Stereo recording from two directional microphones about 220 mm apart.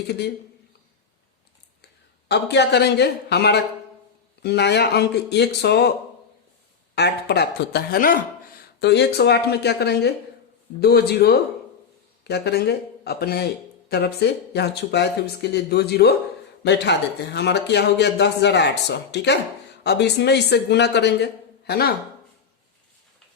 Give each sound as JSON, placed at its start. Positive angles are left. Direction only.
{"t": 1.8, "sound": "a man's voice", "side_deg": 50}
{"t": 6.9, "sound": "a man's voice", "side_deg": 50}
{"t": 8.8, "sound": "a man's voice", "side_deg": 50}